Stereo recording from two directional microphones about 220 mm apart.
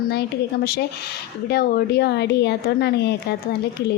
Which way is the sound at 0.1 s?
45° left (ahead or behind).